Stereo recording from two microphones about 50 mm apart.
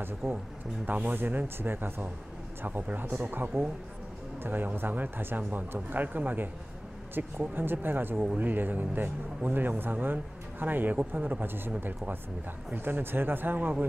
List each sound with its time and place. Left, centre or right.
0.2 s speech: centre
0.8 s speech: right
1.1 s speech: right
12.7 s speech: right